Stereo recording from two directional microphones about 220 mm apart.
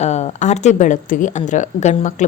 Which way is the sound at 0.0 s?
30° left (ahead or behind).